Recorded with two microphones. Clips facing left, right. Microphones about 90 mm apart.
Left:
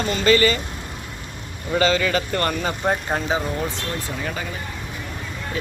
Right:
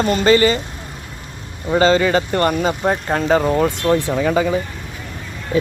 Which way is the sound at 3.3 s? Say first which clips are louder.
Right 8 dB; 65° right (ahead or behind).